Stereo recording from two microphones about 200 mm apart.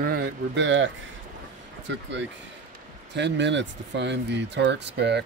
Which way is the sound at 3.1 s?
60° right (ahead or behind).